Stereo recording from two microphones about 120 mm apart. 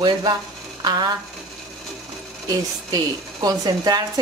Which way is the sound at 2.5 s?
35° right (ahead or behind).